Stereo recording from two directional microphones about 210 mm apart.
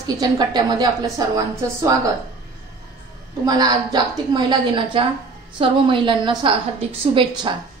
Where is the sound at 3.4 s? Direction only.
20° right (ahead or behind).